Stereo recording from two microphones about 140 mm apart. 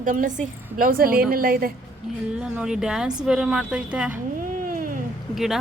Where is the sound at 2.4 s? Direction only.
5° right (ahead or behind).